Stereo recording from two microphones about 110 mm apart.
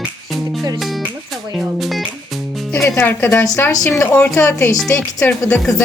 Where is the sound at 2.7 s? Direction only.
15° left (ahead or behind).